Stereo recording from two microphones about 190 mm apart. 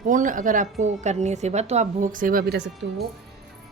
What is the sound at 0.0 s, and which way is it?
A woman's voice, 45° right (ahead or behind).